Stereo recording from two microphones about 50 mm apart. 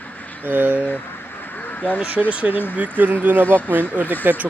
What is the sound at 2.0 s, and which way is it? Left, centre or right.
Speech, right.